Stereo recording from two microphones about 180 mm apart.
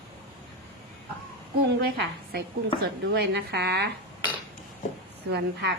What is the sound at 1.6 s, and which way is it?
A woman's voice, 70° right (ahead or behind).